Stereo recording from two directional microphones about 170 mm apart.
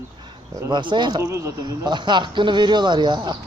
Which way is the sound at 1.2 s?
15° right (ahead or behind).